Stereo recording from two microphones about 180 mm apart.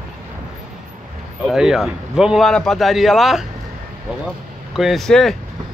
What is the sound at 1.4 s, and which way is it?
A man's voice, 5° right (ahead or behind).